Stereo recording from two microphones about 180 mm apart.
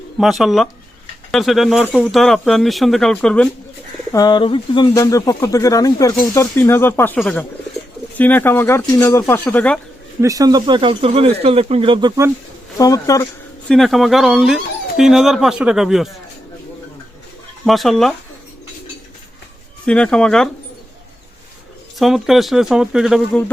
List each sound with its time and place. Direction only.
0.2 s speech: centre (ahead or behind)
4.1 s speech: 20° left (ahead or behind)
10.2 s speech: 20° right (ahead or behind)
12.7 s speech: 20° left (ahead or behind)
13.7 s speech: centre (ahead or behind)
17.7 s speech: centre (ahead or behind)
19.8 s speech: 5° left (ahead or behind)
21.9 s speech: centre (ahead or behind)